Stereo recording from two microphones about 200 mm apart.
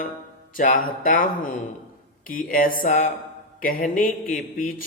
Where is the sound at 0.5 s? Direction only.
45° left (ahead or behind).